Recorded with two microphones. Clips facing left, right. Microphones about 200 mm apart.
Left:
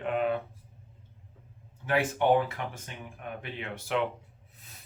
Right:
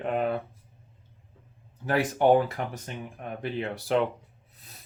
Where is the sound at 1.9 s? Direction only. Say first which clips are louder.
Right 3 dB; 40° right (ahead or behind).